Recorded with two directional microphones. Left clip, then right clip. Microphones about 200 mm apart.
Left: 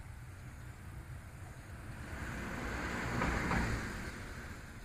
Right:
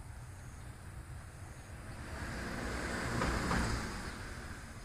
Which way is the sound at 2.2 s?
50° right (ahead or behind).